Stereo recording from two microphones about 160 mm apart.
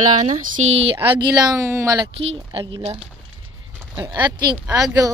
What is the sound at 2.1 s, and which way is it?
Speech, 35° right (ahead or behind).